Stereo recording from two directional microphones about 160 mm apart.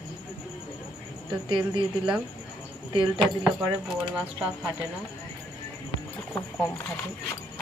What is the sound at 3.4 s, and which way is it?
Speech, 5° right (ahead or behind).